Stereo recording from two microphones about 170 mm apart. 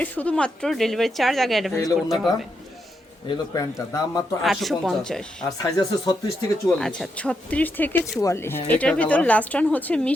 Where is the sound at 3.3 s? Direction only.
20° left (ahead or behind).